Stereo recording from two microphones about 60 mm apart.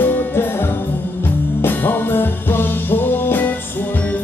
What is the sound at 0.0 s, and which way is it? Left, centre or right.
Music, left.